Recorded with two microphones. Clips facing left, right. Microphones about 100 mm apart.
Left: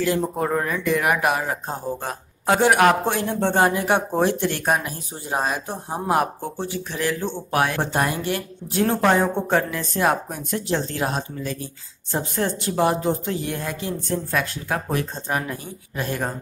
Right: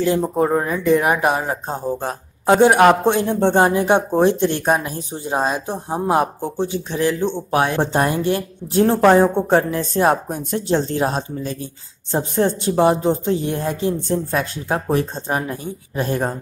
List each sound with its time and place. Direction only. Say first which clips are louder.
0.4 s speech: right 5 dB; 20° right (ahead or behind)